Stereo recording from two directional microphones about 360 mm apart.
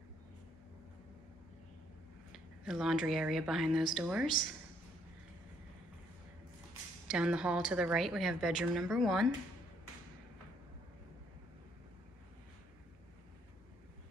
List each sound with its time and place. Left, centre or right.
2.3 s a woman's voice: centre
7.1 s a woman's voice: centre